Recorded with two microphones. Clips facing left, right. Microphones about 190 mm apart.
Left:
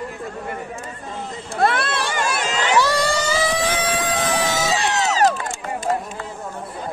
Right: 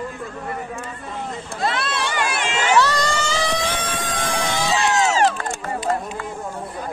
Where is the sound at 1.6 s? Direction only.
60° left (ahead or behind); by 2.6 s 40° left (ahead or behind).